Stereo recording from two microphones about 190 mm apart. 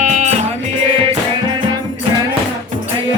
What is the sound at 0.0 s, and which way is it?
Music, 40° right (ahead or behind).